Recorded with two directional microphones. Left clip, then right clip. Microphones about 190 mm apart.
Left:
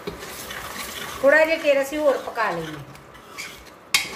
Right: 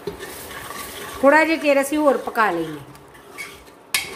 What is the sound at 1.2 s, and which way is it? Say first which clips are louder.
A woman's voice: right 2 dB; 60° right (ahead or behind).